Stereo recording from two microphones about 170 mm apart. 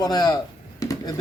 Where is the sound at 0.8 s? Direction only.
20° left (ahead or behind).